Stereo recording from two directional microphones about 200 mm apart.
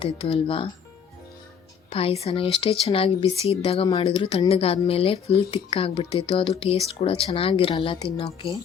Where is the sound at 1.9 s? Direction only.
30° left (ahead or behind).